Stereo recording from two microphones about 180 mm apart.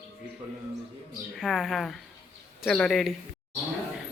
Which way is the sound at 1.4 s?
Centre (ahead or behind).